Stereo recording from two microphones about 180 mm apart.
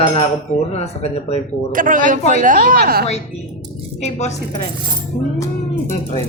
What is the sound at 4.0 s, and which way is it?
Mantra, 40° left (ahead or behind).